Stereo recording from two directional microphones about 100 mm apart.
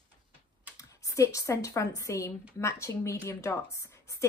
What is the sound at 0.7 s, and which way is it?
A woman's voice, 35° left (ahead or behind).